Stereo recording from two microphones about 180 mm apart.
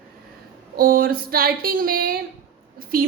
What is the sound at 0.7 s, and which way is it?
A woman's voice, 55° right (ahead or behind).